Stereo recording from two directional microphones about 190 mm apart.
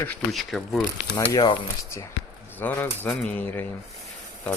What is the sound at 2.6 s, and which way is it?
Speech, 10° left (ahead or behind).